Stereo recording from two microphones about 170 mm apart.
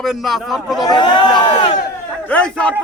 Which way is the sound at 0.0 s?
Centre (ahead or behind).